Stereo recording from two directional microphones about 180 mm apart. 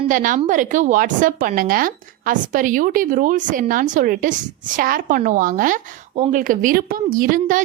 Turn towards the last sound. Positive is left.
turn(degrees=-50)  # may be behind; listen again after turning